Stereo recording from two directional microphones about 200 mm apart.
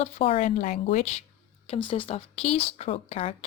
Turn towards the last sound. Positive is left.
turn(degrees=30)  # may be behind; listen again after turning